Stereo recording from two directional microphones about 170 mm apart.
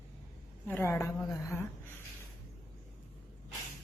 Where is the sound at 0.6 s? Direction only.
15° left (ahead or behind).